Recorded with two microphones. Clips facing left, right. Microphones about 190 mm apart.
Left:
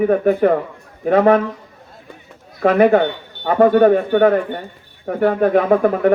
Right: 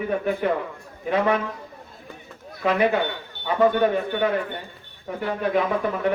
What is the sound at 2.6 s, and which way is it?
A man's voice, 50° left (ahead or behind).